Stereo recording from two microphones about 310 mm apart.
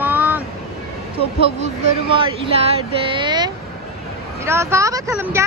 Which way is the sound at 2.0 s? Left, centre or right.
Centre.